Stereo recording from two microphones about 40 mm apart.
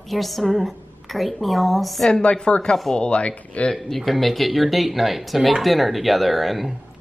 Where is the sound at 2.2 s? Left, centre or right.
Left.